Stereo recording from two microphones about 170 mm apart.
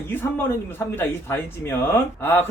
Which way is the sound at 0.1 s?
15° left (ahead or behind).